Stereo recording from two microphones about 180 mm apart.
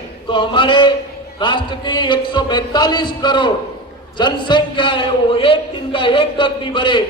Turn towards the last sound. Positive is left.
turn(degrees=25)  # may be behind; listen again after turning